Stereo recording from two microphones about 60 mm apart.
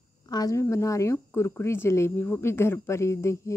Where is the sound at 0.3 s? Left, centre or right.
Left.